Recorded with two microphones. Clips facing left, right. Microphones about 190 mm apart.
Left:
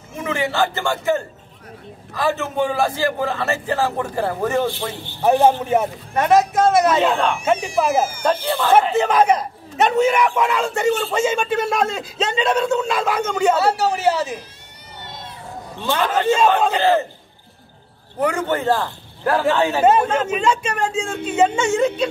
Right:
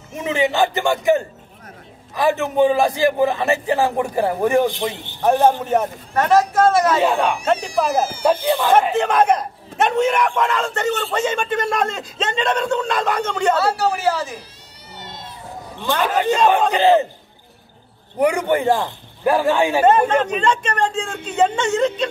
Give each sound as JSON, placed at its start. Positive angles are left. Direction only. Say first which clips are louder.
{"t": 0.2, "sound": "a man's voice", "louder": "right 3 dB", "side_deg": -20}
{"t": 5.2, "sound": "a man's voice", "louder": "left 1 dB", "side_deg": 10}
{"t": 6.1, "sound": "speech", "louder": "even", "side_deg": 20}
{"t": 7.0, "sound": "a man's voice", "louder": "even", "side_deg": -10}
{"t": 7.6, "sound": "a man's voice", "louder": "left 1 dB", "side_deg": 10}
{"t": 8.2, "sound": "a man's voice", "louder": "right 3 dB", "side_deg": -15}
{"t": 8.9, "sound": "a man's voice", "louder": "even", "side_deg": 5}
{"t": 13.6, "sound": "speech", "louder": "left 1 dB", "side_deg": 20}
{"t": 16.0, "sound": "a man's voice", "louder": "even", "side_deg": -10}
{"t": 18.2, "sound": "a man's voice", "louder": "right 3 dB", "side_deg": -15}
{"t": 20.1, "sound": "a man's voice", "louder": "right 1 dB", "side_deg": 5}